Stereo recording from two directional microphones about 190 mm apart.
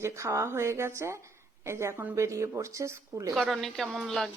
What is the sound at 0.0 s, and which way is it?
Speech, 15° right (ahead or behind).